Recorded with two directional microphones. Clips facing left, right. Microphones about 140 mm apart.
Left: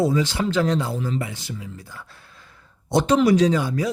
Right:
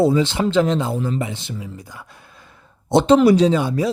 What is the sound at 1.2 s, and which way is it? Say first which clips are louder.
A woman's voice: right 4 dB; 25° right (ahead or behind).